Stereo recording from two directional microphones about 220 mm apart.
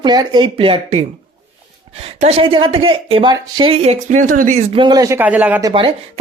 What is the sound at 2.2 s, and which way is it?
Speech, 25° right (ahead or behind).